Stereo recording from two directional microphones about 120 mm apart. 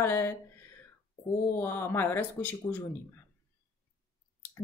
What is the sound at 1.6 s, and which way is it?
A woman's voice, 20° left (ahead or behind).